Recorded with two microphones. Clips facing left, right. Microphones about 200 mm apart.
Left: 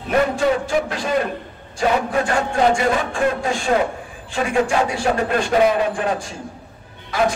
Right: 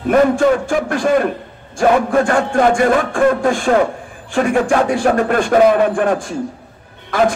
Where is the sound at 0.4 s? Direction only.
50° right (ahead or behind).